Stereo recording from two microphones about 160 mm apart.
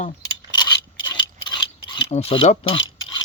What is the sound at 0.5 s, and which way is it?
Mechanisms, 30° left (ahead or behind).